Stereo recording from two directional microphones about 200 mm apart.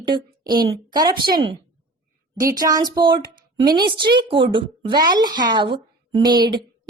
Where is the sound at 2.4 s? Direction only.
15° right (ahead or behind).